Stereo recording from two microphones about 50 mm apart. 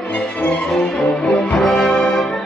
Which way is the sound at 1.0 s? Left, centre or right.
Left.